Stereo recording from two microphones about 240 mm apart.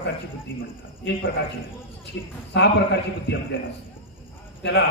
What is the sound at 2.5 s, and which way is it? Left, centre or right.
Speech, left.